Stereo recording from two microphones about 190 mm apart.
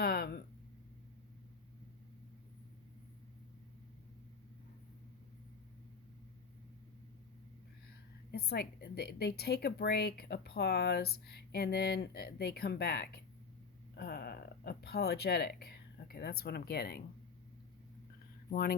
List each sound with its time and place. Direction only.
0.0 s a sound: 55° left (ahead or behind)
8.3 s speech: 55° left (ahead or behind)
18.5 s speech: 50° left (ahead or behind)